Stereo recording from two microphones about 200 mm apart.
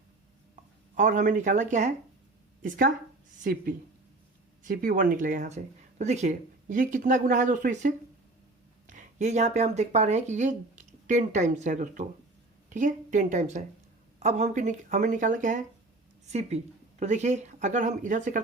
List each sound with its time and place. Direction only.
0.9 s a woman's voice: 40° right (ahead or behind)